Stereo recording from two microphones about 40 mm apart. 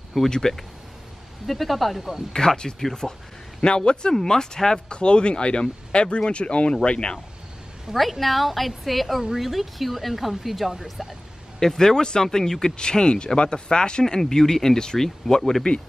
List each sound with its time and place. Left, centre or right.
0.3 s a woman's voice: centre
2.3 s speech: centre
7.9 s a woman's voice: centre
11.6 s speech: centre